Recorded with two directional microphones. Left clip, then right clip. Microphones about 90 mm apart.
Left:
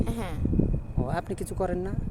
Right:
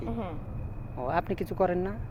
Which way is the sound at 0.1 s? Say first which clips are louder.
Left 1 dB; 70° left (ahead or behind).